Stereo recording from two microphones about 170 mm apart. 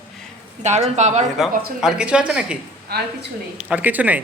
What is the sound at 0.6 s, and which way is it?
Speech, 45° right (ahead or behind).